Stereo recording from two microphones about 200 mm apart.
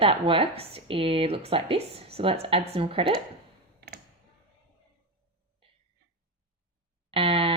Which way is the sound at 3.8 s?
55° right (ahead or behind).